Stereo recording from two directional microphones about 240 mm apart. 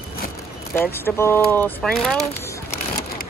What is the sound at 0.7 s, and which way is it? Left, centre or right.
Speech, centre.